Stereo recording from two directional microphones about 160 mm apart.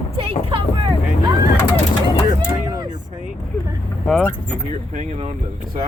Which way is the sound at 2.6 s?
25° right (ahead or behind).